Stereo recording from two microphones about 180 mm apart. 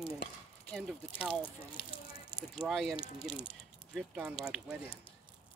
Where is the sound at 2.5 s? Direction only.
Centre (ahead or behind).